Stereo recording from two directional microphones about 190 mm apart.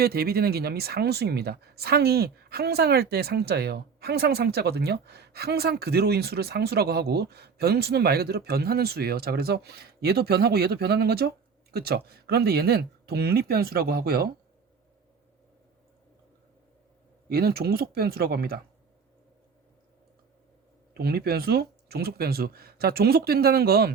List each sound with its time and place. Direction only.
0.0 s a woman's voice: 55° right (ahead or behind)
17.2 s speech: 55° right (ahead or behind)
20.9 s a woman's voice: 55° right (ahead or behind)